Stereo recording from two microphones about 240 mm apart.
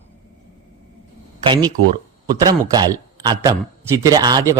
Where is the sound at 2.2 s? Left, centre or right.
Centre.